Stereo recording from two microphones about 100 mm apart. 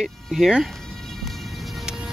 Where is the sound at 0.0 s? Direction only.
5° right (ahead or behind).